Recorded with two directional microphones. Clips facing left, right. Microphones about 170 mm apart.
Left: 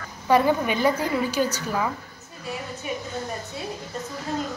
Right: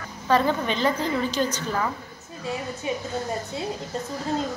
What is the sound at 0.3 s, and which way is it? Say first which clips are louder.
A woman's voice: left 2 dB; 10° left (ahead or behind).